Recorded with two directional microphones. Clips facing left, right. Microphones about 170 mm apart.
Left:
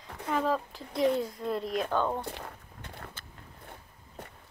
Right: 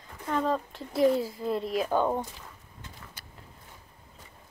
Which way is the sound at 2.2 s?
60° left (ahead or behind).